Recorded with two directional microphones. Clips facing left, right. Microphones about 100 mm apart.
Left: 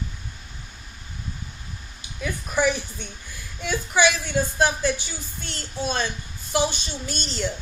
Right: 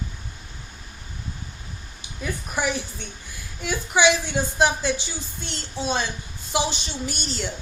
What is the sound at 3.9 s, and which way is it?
A woman's voice, 20° right (ahead or behind).